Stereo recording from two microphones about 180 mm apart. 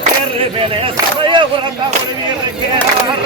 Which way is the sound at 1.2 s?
25° right (ahead or behind).